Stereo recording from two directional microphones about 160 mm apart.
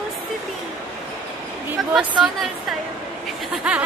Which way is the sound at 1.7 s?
10° right (ahead or behind).